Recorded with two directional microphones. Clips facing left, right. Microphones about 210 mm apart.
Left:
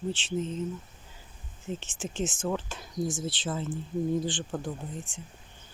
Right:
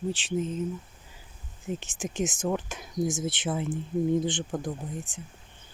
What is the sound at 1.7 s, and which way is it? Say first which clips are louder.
Speech: right 2 dB; 15° right (ahead or behind).